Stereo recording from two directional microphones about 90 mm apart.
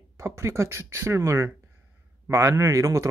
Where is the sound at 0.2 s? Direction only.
30° right (ahead or behind).